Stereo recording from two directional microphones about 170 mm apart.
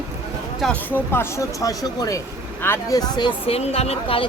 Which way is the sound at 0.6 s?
Centre (ahead or behind).